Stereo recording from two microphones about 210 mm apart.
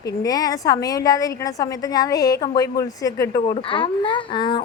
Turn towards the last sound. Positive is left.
turn(degrees=20)  # may be behind; listen again after turning